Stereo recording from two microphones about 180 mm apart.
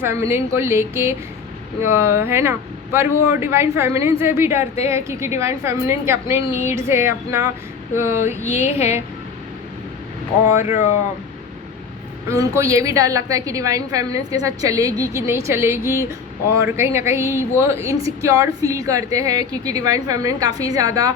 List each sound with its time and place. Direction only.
0.0 s a woman's voice: 15° right (ahead or behind)
10.6 s speech: 40° left (ahead or behind)
12.3 s a woman's voice: 15° right (ahead or behind)